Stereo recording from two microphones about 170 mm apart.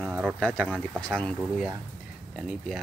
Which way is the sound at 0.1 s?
5° right (ahead or behind).